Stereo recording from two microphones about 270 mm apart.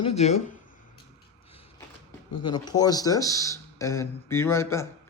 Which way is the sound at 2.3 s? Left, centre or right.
Centre.